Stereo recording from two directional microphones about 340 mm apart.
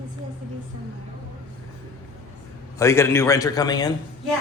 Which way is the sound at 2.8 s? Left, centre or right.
Centre.